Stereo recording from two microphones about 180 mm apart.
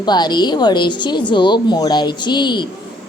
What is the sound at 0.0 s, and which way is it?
Speech, 25° left (ahead or behind).